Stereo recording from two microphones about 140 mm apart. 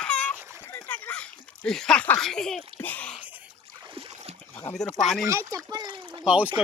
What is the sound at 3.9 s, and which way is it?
Boat, 45° right (ahead or behind).